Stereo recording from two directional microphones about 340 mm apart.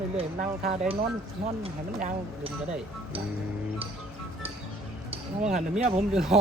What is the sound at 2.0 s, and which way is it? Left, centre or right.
Speech, right.